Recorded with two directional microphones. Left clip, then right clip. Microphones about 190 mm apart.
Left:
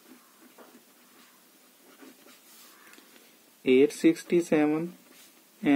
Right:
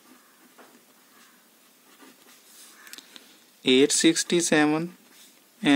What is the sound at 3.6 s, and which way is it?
Speech, 25° right (ahead or behind).